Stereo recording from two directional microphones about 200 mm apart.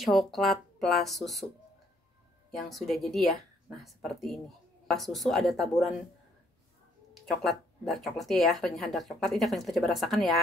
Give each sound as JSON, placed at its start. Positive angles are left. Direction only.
{"t": 0.0, "sound": "speech", "side_deg": 0}
{"t": 2.5, "sound": "speech", "side_deg": 0}
{"t": 7.2, "sound": "speech", "side_deg": 0}